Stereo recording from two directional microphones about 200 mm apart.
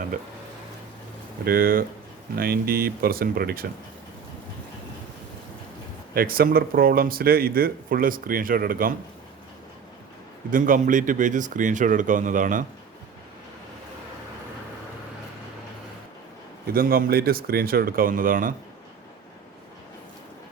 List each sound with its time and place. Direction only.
1.5 s speech: 45° right (ahead or behind)
6.1 s speech: 50° right (ahead or behind)
10.5 s speech: 40° right (ahead or behind)
16.7 s speech: 50° right (ahead or behind)